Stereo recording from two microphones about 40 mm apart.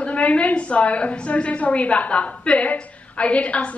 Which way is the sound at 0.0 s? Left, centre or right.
Left.